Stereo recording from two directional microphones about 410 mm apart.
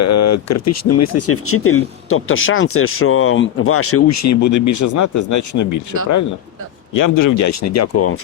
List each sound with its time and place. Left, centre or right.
0.0 s speech: left